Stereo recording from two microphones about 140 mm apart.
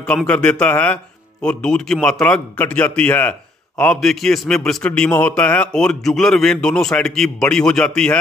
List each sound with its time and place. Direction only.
0.0 s a man's voice: 5° left (ahead or behind)